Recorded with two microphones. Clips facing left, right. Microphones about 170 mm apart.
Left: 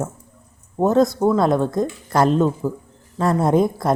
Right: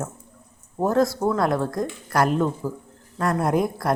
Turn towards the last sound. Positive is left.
turn(degrees=25)  # may be behind; listen again after turning